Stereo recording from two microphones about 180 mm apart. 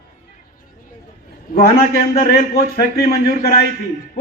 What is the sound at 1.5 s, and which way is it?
A man's voice, 55° left (ahead or behind).